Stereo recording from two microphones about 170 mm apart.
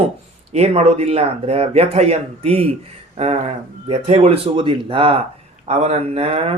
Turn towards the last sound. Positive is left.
turn(degrees=-35)  # may be behind; listen again after turning